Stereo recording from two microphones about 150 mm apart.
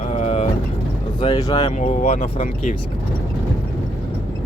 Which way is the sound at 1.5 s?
40° left (ahead or behind).